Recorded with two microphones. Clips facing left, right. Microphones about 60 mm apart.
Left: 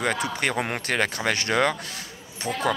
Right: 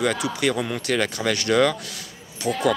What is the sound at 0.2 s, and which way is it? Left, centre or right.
Speech, left.